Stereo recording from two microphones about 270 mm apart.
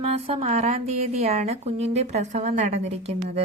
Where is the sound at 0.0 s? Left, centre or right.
Right.